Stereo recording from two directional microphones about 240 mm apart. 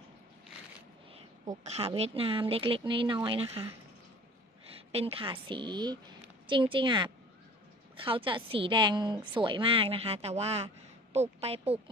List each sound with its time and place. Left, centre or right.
1.1 s a woman's voice: right
4.9 s a woman's voice: right